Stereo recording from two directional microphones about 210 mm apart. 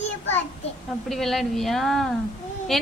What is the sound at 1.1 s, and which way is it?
Speech, centre (ahead or behind).